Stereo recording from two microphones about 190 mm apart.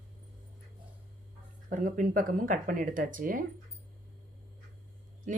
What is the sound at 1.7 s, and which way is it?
Speech, 45° right (ahead or behind).